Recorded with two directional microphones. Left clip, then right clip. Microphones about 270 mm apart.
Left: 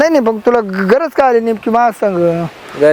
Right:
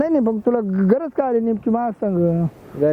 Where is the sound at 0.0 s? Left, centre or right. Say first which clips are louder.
Left 8 dB; centre.